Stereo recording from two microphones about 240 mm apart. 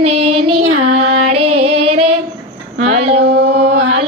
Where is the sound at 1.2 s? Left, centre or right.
Right.